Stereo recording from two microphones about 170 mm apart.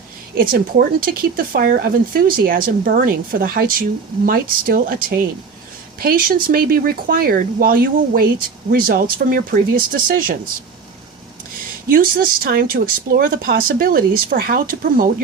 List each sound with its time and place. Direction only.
0.5 s speech: 60° right (ahead or behind)
11.9 s speech: 55° right (ahead or behind)